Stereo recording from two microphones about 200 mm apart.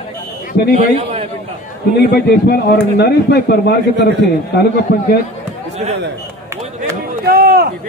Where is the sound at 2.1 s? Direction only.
55° left (ahead or behind).